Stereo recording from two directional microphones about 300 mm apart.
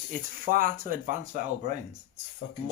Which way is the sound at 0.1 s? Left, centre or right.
Right.